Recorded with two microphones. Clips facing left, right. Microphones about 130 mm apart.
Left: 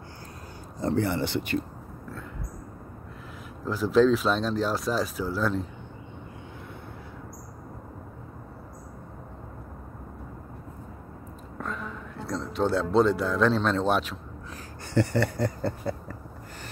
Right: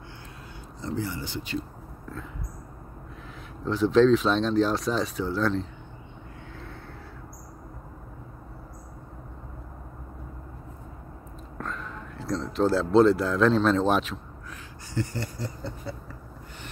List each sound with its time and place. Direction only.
0.7 s speech: 55° left (ahead or behind)
3.6 s speech: 5° left (ahead or behind)
11.5 s a man's voice: centre (ahead or behind)
15.0 s speech: 65° left (ahead or behind); by 16.2 s 50° left (ahead or behind)